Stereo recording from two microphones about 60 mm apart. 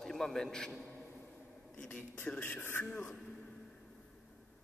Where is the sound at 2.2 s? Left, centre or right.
Left.